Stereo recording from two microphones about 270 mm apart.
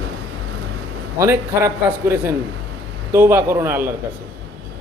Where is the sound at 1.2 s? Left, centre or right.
Centre.